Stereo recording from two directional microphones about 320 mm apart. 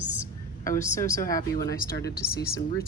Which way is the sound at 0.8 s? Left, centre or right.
Centre.